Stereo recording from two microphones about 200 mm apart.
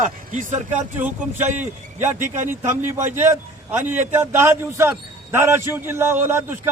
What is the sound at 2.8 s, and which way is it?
Speech, 40° right (ahead or behind).